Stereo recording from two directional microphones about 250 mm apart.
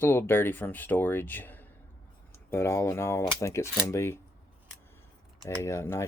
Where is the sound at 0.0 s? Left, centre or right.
Centre.